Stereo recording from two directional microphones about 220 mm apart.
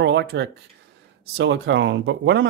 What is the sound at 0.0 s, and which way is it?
Speech, 50° right (ahead or behind).